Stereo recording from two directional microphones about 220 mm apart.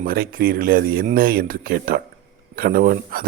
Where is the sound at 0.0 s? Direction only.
40° right (ahead or behind).